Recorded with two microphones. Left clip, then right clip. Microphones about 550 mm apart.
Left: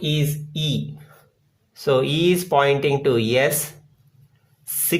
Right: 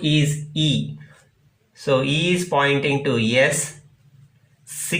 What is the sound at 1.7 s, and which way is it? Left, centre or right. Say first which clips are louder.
Speech: left 1 dB; left.